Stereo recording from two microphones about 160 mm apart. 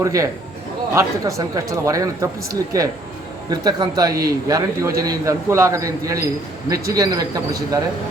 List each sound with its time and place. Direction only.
0.0 s speech: 20° right (ahead or behind)